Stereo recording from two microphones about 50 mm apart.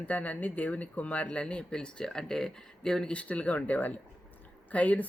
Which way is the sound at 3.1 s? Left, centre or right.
Left.